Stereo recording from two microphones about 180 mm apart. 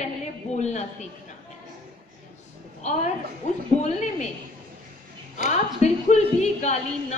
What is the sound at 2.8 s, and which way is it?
Speech, 40° left (ahead or behind).